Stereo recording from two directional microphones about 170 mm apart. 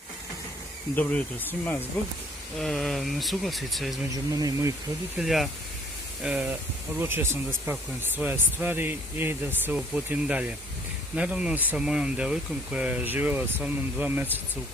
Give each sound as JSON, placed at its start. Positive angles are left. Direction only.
{"t": 0.9, "sound": "speech", "side_deg": 10}
{"t": 4.1, "sound": "speech", "side_deg": -20}
{"t": 5.2, "sound": "speech", "side_deg": 0}